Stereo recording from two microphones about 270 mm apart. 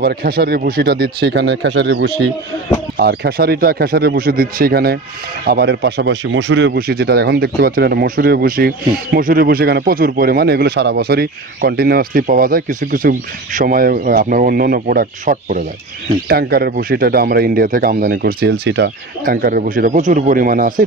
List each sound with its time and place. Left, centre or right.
0.0 s speech: right